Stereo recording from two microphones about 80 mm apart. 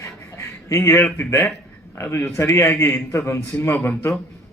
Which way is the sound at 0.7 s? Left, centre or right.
Left.